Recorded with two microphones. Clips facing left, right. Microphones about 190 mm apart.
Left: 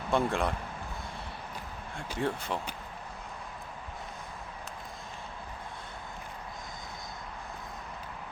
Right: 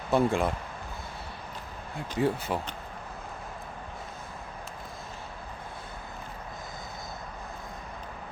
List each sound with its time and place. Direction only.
0.1 s speech: centre (ahead or behind)
2.0 s speech: 5° right (ahead or behind)